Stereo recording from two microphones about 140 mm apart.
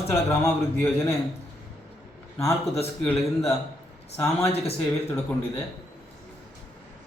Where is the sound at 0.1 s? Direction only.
15° left (ahead or behind).